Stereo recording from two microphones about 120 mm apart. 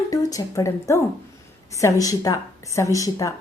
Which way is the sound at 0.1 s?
30° left (ahead or behind).